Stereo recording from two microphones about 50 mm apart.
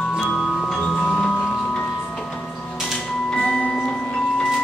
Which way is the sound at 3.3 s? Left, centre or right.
Centre.